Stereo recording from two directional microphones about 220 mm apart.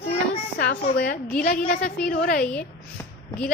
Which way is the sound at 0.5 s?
50° left (ahead or behind).